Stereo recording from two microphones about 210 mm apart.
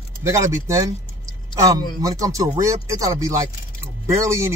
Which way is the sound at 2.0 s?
15° right (ahead or behind).